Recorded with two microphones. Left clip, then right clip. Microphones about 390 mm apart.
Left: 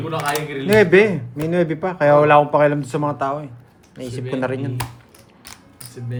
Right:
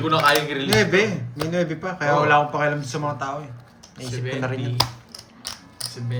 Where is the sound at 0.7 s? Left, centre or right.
Centre.